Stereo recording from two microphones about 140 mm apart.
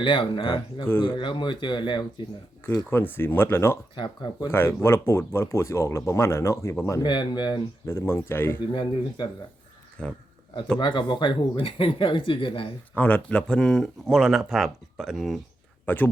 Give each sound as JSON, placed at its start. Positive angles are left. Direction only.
{"t": 0.0, "sound": "speech", "side_deg": 35}
{"t": 2.9, "sound": "speech", "side_deg": 15}
{"t": 3.9, "sound": "speech", "side_deg": 35}
{"t": 4.4, "sound": "speech", "side_deg": 15}
{"t": 7.0, "sound": "speech", "side_deg": 35}
{"t": 7.9, "sound": "speech", "side_deg": 20}
{"t": 8.7, "sound": "speech", "side_deg": 35}
{"t": 10.0, "sound": "speech", "side_deg": 5}
{"t": 10.8, "sound": "speech", "side_deg": 30}
{"t": 12.9, "sound": "speech", "side_deg": 10}
{"t": 15.9, "sound": "speech", "side_deg": 15}